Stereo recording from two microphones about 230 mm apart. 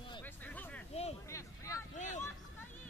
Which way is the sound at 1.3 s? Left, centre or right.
Centre.